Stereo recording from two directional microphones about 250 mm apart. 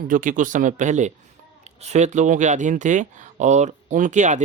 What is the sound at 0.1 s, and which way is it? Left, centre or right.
Speech, right.